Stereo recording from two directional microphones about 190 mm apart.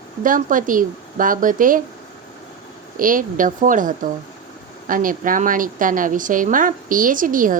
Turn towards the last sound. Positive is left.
turn(degrees=-45)  # may be behind; listen again after turning